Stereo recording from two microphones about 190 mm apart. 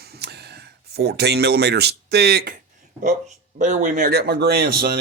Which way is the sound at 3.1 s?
40° right (ahead or behind).